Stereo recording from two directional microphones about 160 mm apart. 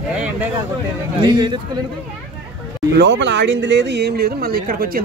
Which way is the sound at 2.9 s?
90° right.